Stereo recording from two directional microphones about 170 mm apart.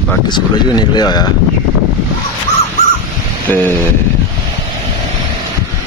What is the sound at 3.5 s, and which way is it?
Speech, 10° left (ahead or behind).